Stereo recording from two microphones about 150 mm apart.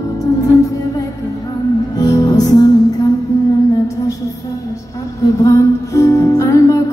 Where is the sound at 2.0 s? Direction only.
25° left (ahead or behind).